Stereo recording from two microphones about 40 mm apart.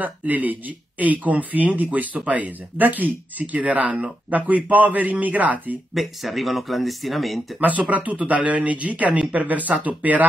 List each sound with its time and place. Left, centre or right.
0.0 s a man's voice: right
5.9 s speech: centre
7.6 s speech: right